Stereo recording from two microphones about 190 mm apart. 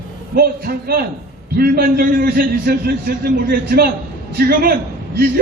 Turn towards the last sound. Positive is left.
turn(degrees=-55)  # may be behind; listen again after turning